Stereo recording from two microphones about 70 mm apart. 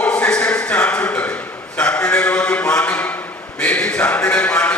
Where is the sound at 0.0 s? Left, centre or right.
Centre.